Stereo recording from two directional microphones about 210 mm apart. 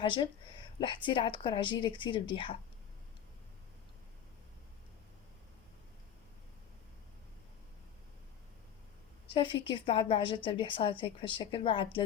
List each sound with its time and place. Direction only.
0.0 s a woman's voice: 25° left (ahead or behind)
9.3 s a woman's voice: 25° left (ahead or behind)